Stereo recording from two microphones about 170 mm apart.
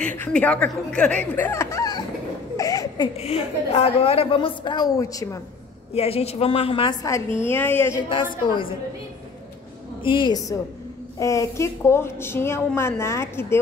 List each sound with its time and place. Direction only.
0.0 s a woman's voice: 10° left (ahead or behind)
2.5 s a sound: 20° left (ahead or behind)
3.2 s a woman's voice: 35° left (ahead or behind); by 5.4 s 20° left (ahead or behind)
5.9 s a woman's voice: 35° left (ahead or behind); by 8.0 s 10° left (ahead or behind)
8.1 s a woman's voice: 30° left (ahead or behind)
10.0 s a woman's voice: 30° left (ahead or behind)